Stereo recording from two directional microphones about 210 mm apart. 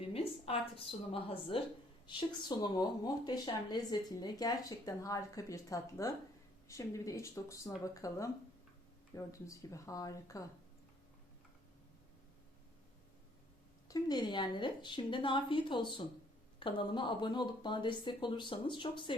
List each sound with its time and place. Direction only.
0.1 s a woman's voice: 25° left (ahead or behind)
13.8 s speech: 20° left (ahead or behind)